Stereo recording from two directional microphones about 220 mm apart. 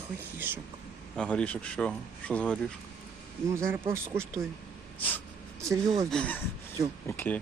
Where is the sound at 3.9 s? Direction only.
10° right (ahead or behind).